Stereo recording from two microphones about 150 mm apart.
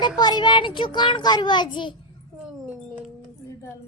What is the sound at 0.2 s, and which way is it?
A child's voice, 30° left (ahead or behind).